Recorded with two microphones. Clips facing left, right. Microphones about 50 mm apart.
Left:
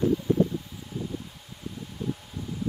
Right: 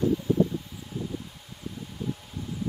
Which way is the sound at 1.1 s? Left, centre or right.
Centre.